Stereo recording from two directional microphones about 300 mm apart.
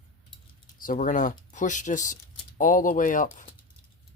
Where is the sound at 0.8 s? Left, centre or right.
Left.